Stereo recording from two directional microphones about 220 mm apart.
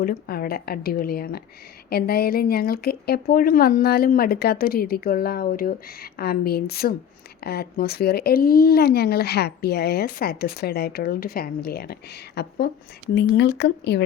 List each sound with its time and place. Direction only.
0.0 s speech: 40° left (ahead or behind)